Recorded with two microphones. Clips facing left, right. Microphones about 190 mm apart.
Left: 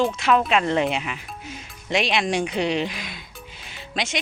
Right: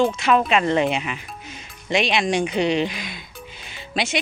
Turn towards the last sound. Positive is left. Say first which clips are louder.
# right 3 dB
turn(degrees=-5)  # may be behind; listen again after turning